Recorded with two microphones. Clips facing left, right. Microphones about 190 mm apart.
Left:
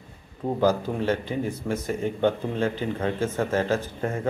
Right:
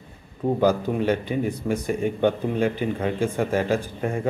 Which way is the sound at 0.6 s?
15° right (ahead or behind).